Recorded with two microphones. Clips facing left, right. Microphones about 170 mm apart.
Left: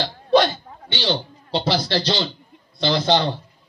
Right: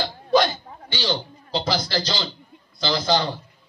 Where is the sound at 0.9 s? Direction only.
30° left (ahead or behind).